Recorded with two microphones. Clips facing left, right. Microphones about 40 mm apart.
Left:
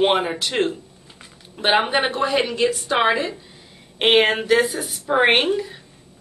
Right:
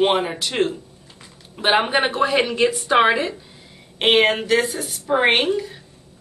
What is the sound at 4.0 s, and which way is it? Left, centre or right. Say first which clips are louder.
A woman's voice: even; centre.